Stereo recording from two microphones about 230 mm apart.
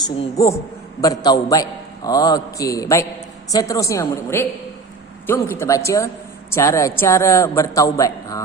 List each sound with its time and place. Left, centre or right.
0.3 s a man's voice: centre